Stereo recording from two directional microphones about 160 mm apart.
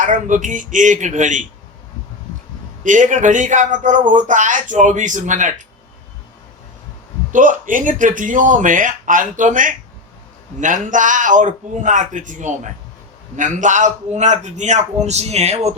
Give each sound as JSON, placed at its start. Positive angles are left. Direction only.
{"t": 0.0, "sound": "a man's voice", "side_deg": -50}
{"t": 2.8, "sound": "a man's voice", "side_deg": -50}
{"t": 7.3, "sound": "a man's voice", "side_deg": -55}